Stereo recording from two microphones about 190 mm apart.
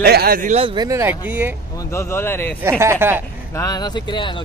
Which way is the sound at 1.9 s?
15° left (ahead or behind).